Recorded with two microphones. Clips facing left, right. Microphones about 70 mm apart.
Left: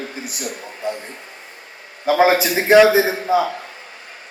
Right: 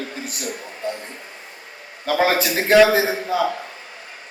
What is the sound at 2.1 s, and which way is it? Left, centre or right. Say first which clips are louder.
A man's voice: left 4 dB; centre.